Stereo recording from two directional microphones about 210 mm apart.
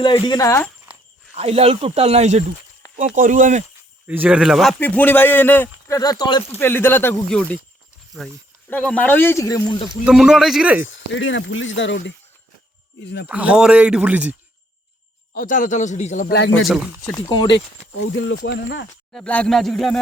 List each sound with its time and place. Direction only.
0.0 s speech: 20° left (ahead or behind)
1.4 s speech: 30° right (ahead or behind)
4.0 s speech: 10° right (ahead or behind); by 10.0 s 15° left (ahead or behind)
10.1 s speech: centre (ahead or behind)
10.8 s speech: 65° left (ahead or behind)
13.2 s a man's voice: 5° right (ahead or behind)
15.3 s a man's voice: 40° left (ahead or behind)
16.3 s speech: 60° left (ahead or behind)
16.6 s speech: 5° right (ahead or behind)
17.2 s speech: 20° left (ahead or behind)
18.0 s speech: 65° left (ahead or behind)
19.1 s speech: 5° left (ahead or behind)